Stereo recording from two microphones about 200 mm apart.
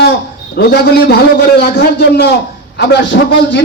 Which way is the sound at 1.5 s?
55° left (ahead or behind).